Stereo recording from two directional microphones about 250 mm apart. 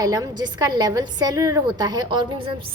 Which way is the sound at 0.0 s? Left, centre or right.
Centre.